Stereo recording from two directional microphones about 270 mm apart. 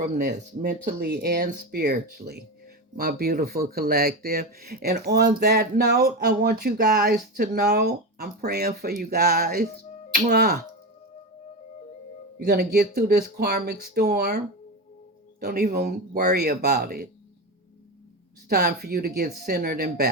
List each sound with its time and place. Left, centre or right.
0.2 s speech: right
12.5 s speech: right
18.4 s speech: right